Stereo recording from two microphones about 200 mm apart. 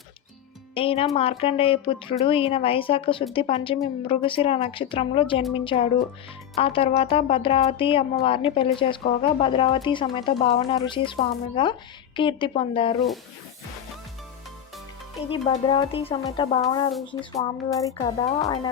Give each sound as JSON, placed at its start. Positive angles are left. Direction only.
{"t": 0.7, "sound": "speech", "side_deg": 25}
{"t": 15.3, "sound": "speech", "side_deg": 25}